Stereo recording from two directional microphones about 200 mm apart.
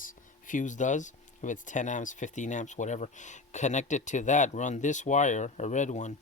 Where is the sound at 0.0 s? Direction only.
40° left (ahead or behind).